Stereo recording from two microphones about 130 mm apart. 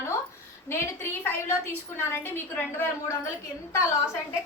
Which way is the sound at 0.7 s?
15° left (ahead or behind).